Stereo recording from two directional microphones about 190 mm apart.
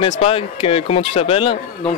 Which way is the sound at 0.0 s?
30° left (ahead or behind).